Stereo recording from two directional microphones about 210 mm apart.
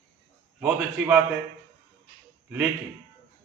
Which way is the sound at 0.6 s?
5° right (ahead or behind).